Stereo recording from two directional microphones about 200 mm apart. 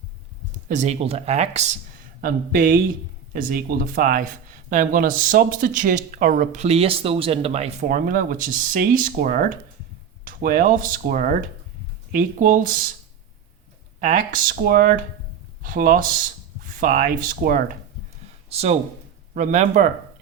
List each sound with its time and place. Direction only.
0.7 s speech: 35° right (ahead or behind)
2.2 s speech: 45° right (ahead or behind)
14.0 s speech: 45° right (ahead or behind)
18.4 s speech: 30° right (ahead or behind)